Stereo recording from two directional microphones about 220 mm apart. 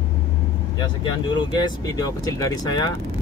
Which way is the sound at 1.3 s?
20° left (ahead or behind).